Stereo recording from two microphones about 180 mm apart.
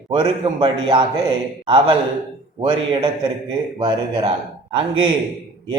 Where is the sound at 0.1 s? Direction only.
25° right (ahead or behind).